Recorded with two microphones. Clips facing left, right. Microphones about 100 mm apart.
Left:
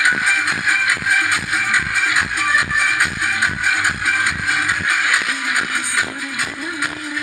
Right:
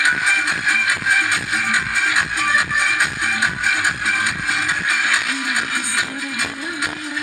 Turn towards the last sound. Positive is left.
turn(degrees=-20)  # may be behind; listen again after turning